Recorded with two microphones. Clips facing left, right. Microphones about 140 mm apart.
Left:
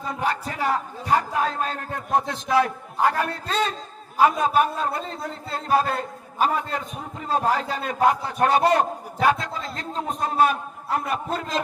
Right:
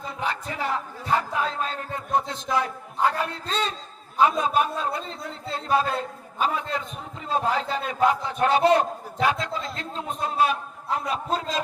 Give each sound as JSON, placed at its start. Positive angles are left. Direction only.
{"t": 0.1, "sound": "a man's voice", "side_deg": 45}